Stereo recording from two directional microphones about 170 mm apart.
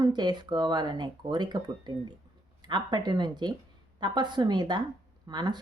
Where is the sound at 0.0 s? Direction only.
25° right (ahead or behind).